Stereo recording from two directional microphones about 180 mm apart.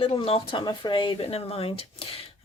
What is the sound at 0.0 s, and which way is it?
Speech, 30° left (ahead or behind).